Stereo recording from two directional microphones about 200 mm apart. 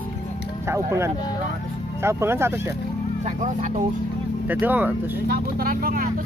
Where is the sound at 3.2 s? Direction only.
35° right (ahead or behind).